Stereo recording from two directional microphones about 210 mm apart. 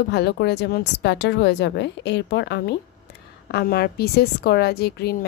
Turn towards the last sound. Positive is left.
turn(degrees=50)  # may be behind; listen again after turning